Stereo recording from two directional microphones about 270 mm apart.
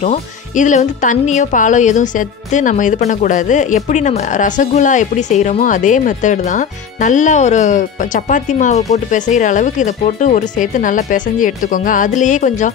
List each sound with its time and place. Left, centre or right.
0.0 s speech: left